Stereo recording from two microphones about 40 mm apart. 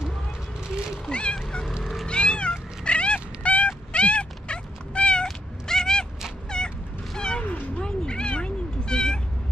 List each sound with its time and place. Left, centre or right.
1.0 s cat: left
2.8 s dog: left
3.6 s cat: left
6.5 s a sound: centre
7.2 s cat: left
7.4 s cat: left
7.8 s cat: left